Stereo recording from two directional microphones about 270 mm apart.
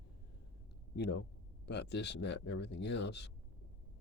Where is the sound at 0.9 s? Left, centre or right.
Left.